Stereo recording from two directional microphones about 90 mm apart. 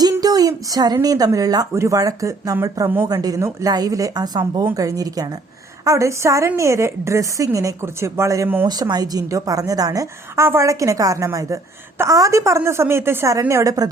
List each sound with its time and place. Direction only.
0.0 s a sound: 45° right (ahead or behind)
1.0 s a woman's voice: 45° right (ahead or behind)
8.6 s a woman's voice: 45° right (ahead or behind)
10.4 s a woman's voice: 30° right (ahead or behind)